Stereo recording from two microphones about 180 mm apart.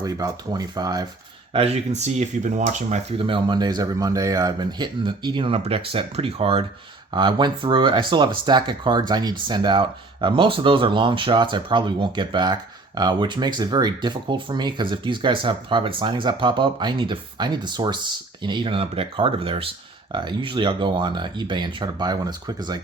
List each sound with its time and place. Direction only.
0.0 s speech: 20° right (ahead or behind)
1.5 s speech: 35° right (ahead or behind)